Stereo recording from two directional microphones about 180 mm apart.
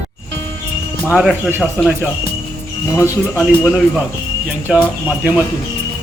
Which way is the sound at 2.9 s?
15° left (ahead or behind).